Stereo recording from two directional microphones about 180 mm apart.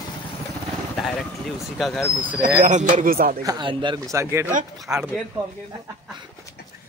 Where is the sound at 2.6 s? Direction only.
40° right (ahead or behind).